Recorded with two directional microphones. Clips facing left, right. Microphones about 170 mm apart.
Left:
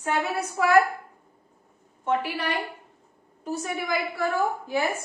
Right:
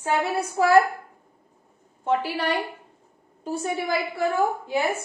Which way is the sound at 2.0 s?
30° right (ahead or behind).